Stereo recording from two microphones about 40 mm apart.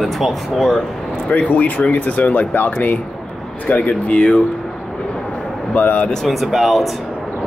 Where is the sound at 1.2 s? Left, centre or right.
Left.